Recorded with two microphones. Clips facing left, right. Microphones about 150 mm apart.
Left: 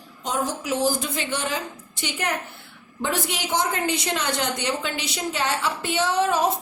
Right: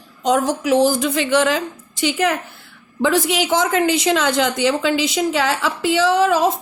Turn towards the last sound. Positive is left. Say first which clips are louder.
# right 6 dB
turn(degrees=-90)